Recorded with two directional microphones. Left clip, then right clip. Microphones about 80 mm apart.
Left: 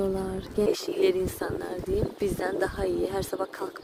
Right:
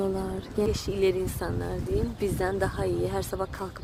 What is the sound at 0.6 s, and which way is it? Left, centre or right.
Speech, left.